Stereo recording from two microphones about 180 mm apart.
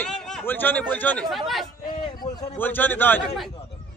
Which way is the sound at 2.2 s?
40° left (ahead or behind).